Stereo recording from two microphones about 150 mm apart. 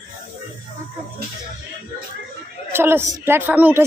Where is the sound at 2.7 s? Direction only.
15° right (ahead or behind).